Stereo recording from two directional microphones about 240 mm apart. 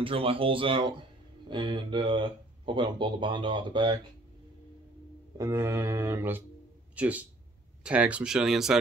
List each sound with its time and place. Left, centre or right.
0.0 s speech: right
5.4 s mantra: centre
7.8 s speech: centre